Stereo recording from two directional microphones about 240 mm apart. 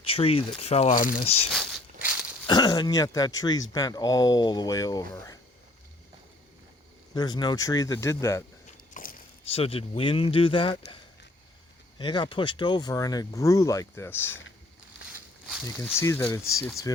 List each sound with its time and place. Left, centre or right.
0.0 s speech: left
1.5 s walk: centre
2.5 s speech: centre
7.1 s speech: centre
8.6 s a sound: left
11.9 s speech: centre
15.1 s a sound: centre
16.0 s speech: centre